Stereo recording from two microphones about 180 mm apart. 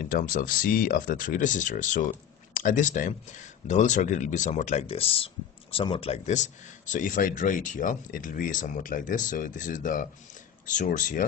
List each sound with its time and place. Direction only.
0.0 s speech: 50° left (ahead or behind)